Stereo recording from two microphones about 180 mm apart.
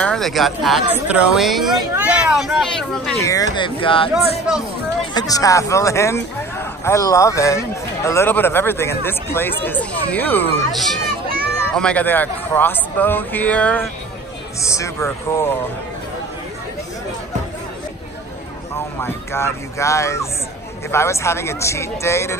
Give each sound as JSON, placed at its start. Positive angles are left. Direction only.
{"t": 0.0, "sound": "speech", "side_deg": 0}
{"t": 3.2, "sound": "speech", "side_deg": 20}
{"t": 5.1, "sound": "a man's voice", "side_deg": 20}
{"t": 18.9, "sound": "a man's voice", "side_deg": 15}